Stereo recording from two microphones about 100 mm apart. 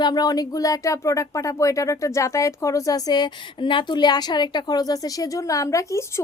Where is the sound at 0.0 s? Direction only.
45° left (ahead or behind).